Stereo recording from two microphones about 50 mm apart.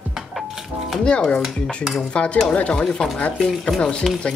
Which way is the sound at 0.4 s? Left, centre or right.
Centre.